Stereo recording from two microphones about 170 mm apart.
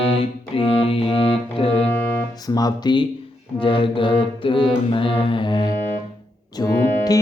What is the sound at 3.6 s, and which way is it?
Mantra, 30° left (ahead or behind).